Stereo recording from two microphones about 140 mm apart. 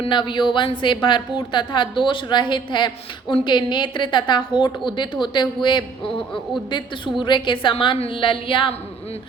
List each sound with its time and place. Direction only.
0.0 s a woman's voice: 35° left (ahead or behind)